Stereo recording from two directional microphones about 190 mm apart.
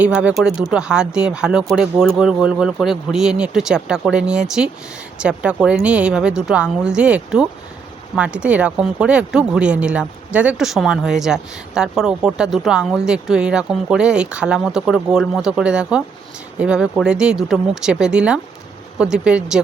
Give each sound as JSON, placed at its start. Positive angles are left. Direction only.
{"t": 0.0, "sound": "speech", "side_deg": -5}